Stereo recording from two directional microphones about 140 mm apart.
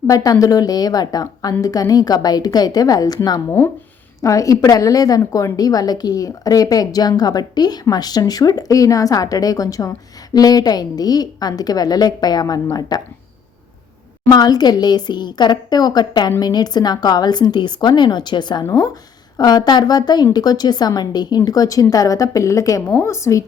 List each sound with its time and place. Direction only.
0.1 s a woman's voice: 25° left (ahead or behind)
14.3 s a woman's voice: 30° left (ahead or behind)